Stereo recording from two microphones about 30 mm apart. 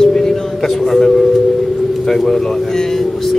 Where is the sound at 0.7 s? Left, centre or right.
Centre.